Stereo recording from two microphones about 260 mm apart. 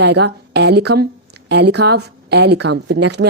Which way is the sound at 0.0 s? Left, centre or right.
Right.